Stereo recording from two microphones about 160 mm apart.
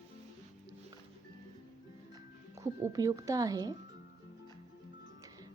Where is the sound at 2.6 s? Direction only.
20° right (ahead or behind).